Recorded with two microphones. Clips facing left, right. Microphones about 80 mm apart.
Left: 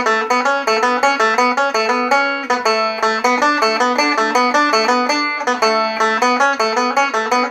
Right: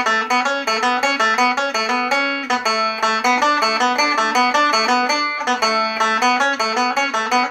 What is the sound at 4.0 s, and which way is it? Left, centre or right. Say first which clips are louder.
Music: left 2 dB; centre.